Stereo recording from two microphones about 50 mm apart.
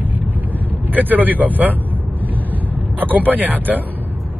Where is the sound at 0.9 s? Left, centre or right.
Right.